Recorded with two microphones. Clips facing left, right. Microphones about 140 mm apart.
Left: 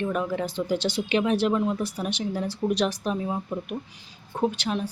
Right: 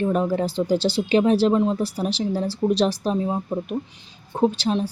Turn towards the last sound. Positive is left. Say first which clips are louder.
# right 5 dB
turn(degrees=-30)  # may be behind; listen again after turning